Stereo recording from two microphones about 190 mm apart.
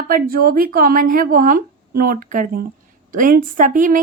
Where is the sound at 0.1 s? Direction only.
50° right (ahead or behind).